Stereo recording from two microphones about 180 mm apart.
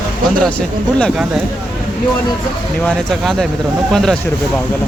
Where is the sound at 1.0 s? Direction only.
5° right (ahead or behind).